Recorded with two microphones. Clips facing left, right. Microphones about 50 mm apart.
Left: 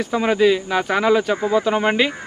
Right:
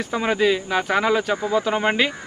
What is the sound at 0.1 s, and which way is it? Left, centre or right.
A man's voice, centre.